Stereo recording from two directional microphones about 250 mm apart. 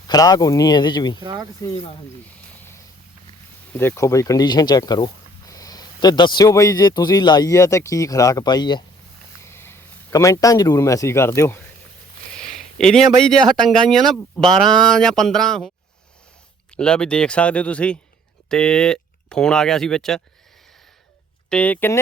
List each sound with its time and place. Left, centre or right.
0.1 s speech: centre
1.2 s speech: centre
3.7 s speech: centre
16.7 s speech: centre
21.5 s speech: centre